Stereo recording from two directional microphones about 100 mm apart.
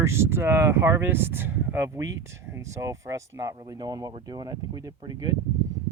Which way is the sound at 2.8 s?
30° right (ahead or behind).